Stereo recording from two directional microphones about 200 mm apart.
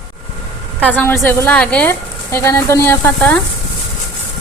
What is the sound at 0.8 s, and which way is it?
A woman's voice, 10° left (ahead or behind).